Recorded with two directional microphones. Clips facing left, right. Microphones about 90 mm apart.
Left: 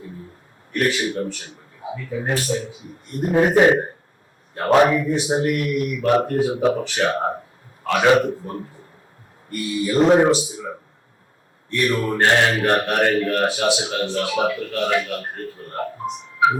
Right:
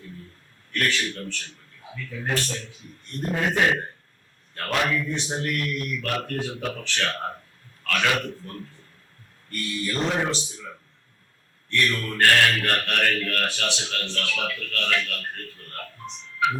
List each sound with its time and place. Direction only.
0.7 s speech: 15° left (ahead or behind)
3.3 s a man's voice: 25° left (ahead or behind)
10.1 s speech: 40° left (ahead or behind)
10.3 s speech: 10° left (ahead or behind)
11.7 s speech: 15° left (ahead or behind)
16.0 s speech: 10° left (ahead or behind)